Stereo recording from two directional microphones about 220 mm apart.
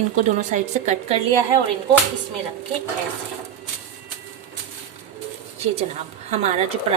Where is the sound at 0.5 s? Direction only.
30° right (ahead or behind).